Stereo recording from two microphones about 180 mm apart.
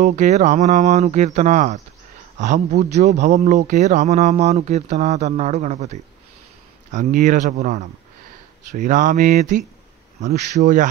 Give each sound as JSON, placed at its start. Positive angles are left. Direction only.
{"t": 0.0, "sound": "speech", "side_deg": -45}
{"t": 10.6, "sound": "speech", "side_deg": -45}